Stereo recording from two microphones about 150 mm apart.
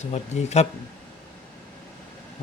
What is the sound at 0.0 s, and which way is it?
Speech, 50° left (ahead or behind).